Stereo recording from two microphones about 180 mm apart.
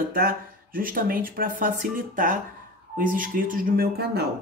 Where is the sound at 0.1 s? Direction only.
55° right (ahead or behind).